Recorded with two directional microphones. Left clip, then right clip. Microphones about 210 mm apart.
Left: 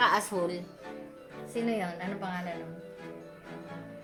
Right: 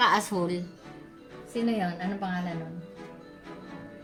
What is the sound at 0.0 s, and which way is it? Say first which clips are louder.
Speech: right 2 dB; 30° right (ahead or behind).